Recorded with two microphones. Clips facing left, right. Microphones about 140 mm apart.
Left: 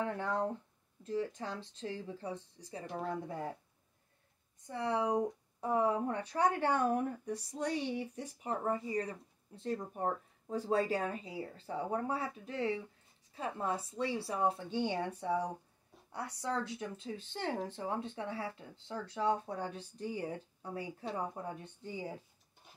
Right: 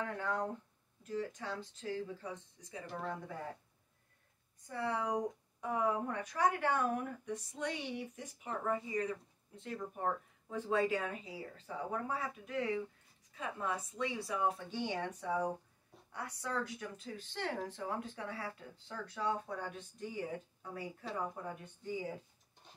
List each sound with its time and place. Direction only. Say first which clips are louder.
0.0 s speech: left 3 dB; 30° left (ahead or behind)
2.9 s speech: left 3 dB; centre (ahead or behind)
4.6 s speech: left 3 dB; 20° left (ahead or behind)